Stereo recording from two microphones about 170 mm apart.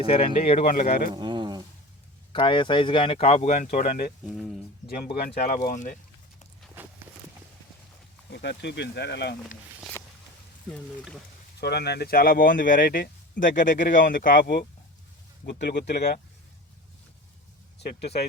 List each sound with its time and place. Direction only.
0.0 s speech: 35° left (ahead or behind)
0.6 s speech: 55° left (ahead or behind)
1.1 s a sound: 25° right (ahead or behind)
2.3 s speech: 30° left (ahead or behind); by 4.1 s 55° left (ahead or behind)
4.3 s speech: centre (ahead or behind)
5.1 s speech: 60° left (ahead or behind)
5.7 s speech: 50° left (ahead or behind)
6.8 s walk: 10° right (ahead or behind)
8.3 s speech: 90° left
10.7 s speech: 5° left (ahead or behind)
11.6 s speech: 75° left (ahead or behind)
15.9 s speech: 75° left (ahead or behind)